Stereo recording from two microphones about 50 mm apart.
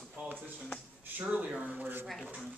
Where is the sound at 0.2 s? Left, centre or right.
Right.